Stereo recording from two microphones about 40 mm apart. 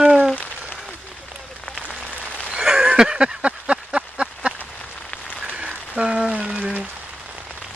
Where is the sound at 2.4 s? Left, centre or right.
Centre.